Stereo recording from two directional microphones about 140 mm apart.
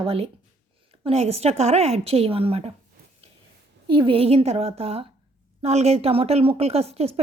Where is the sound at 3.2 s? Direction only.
45° right (ahead or behind).